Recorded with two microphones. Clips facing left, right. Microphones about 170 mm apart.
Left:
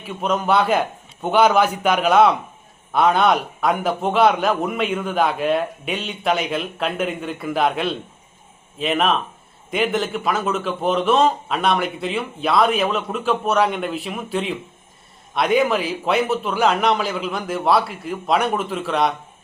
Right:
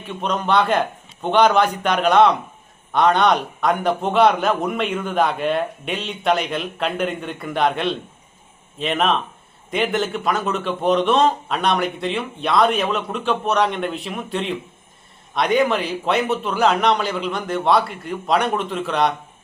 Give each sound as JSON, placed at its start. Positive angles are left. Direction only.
{"t": 0.0, "sound": "a man's voice", "side_deg": 5}